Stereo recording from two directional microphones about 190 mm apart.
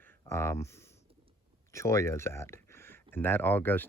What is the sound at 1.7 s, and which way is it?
Speech, 15° left (ahead or behind).